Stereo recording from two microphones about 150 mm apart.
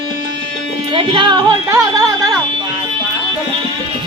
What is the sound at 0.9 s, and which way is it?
Music, 35° right (ahead or behind).